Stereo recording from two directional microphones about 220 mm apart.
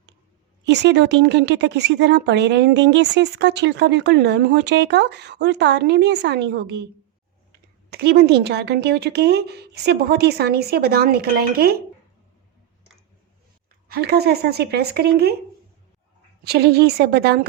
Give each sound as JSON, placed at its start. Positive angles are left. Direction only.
{"t": 0.6, "sound": "a woman's voice", "side_deg": -50}
{"t": 7.9, "sound": "a woman's voice", "side_deg": -45}
{"t": 13.8, "sound": "a woman's voice", "side_deg": -45}
{"t": 16.4, "sound": "a woman's voice", "side_deg": -50}